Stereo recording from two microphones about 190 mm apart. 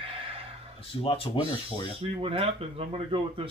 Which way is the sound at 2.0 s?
30° right (ahead or behind).